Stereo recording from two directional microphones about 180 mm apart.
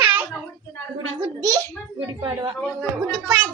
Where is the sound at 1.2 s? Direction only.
20° right (ahead or behind).